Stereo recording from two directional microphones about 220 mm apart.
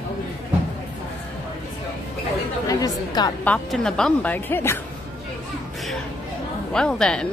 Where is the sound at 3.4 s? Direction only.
5° left (ahead or behind).